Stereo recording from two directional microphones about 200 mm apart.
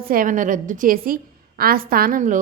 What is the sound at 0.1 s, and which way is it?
A woman's voice, 40° right (ahead or behind).